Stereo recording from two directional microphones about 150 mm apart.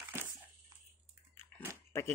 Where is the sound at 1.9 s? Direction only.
20° left (ahead or behind).